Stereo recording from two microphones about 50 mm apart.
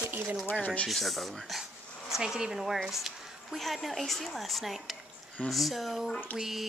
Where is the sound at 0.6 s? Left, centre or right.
Left.